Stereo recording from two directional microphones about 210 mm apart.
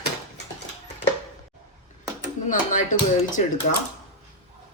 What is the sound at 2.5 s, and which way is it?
Speech, 40° left (ahead or behind).